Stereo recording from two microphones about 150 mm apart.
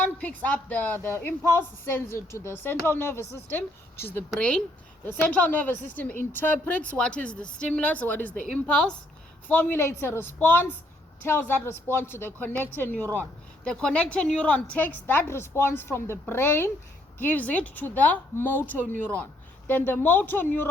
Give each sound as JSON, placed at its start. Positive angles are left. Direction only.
{"t": 0.0, "sound": "speech", "side_deg": 10}